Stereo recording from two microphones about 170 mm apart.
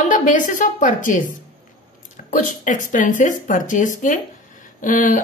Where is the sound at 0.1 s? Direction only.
50° left (ahead or behind).